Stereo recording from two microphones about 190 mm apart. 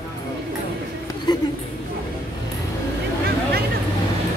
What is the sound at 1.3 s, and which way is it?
Speech, 20° left (ahead or behind).